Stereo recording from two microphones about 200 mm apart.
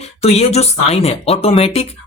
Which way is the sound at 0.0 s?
30° left (ahead or behind).